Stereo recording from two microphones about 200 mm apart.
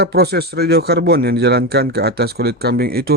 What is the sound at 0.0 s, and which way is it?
Speech, 55° right (ahead or behind).